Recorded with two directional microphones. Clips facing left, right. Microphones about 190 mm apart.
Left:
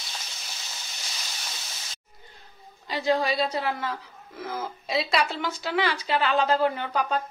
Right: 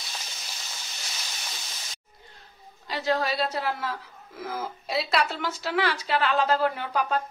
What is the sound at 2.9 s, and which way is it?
A woman's voice, centre (ahead or behind).